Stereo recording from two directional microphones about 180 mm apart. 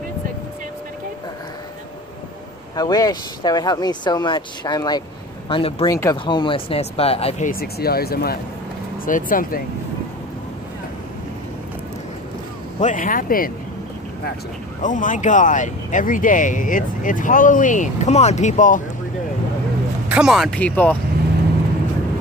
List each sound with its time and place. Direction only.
2.7 s speech: 20° left (ahead or behind)
5.9 s speech: 20° left (ahead or behind); by 9.6 s 50° left (ahead or behind)
12.7 s speech: 45° left (ahead or behind)
14.8 s speech: 45° left (ahead or behind)
20.1 s speech: 5° right (ahead or behind)